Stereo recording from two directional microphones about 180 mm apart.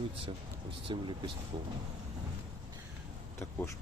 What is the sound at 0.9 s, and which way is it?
Speech, 25° right (ahead or behind).